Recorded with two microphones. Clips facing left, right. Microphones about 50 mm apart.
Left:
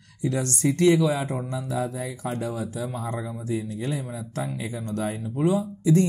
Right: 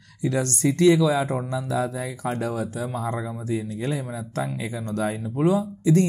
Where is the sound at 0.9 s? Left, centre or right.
Right.